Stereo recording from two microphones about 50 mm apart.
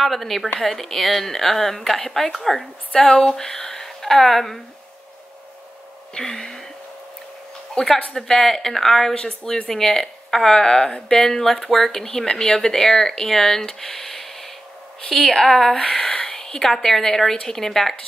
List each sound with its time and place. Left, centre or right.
0.0 s a woman's voice: centre
6.1 s speech: centre
7.7 s speech: centre